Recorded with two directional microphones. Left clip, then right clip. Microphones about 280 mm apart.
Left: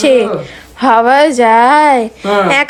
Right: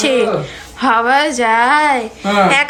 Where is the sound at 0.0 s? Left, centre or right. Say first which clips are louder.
Left 5 dB; centre.